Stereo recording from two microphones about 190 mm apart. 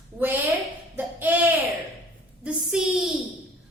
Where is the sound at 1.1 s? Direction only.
10° right (ahead or behind).